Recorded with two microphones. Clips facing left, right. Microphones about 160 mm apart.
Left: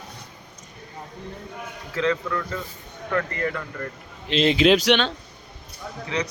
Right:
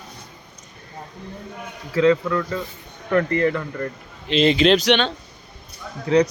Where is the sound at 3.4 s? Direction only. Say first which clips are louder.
Right 6 dB; 30° right (ahead or behind).